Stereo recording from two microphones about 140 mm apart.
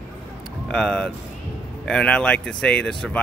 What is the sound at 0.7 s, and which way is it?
Speech, 5° left (ahead or behind).